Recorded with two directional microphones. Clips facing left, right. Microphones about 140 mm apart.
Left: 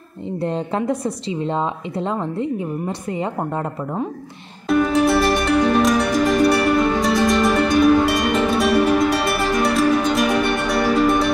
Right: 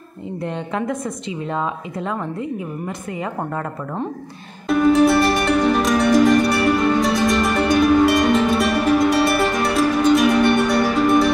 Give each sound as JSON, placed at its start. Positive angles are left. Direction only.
{"t": 0.4, "sound": "a woman's voice", "side_deg": 30}
{"t": 4.6, "sound": "music", "side_deg": 0}